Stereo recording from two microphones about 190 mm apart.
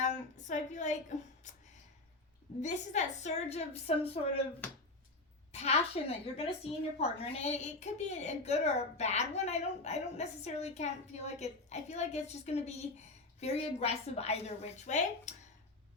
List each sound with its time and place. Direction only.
0.0 s a woman's voice: 40° left (ahead or behind)
2.6 s a woman's voice: 40° left (ahead or behind)
5.5 s a woman's voice: 35° left (ahead or behind)